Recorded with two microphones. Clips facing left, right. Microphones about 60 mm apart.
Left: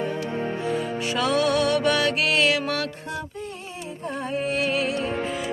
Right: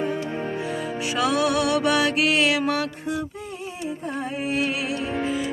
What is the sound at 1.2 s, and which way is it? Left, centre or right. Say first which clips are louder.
Music: even; centre.